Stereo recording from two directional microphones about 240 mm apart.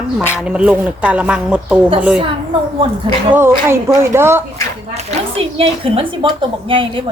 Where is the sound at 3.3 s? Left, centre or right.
Centre.